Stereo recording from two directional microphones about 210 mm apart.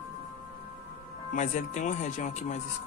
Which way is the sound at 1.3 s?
35° left (ahead or behind).